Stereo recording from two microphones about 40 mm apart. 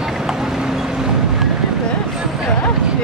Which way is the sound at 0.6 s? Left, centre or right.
Centre.